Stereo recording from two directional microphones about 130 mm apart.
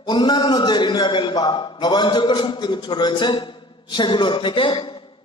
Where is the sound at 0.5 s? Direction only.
35° left (ahead or behind).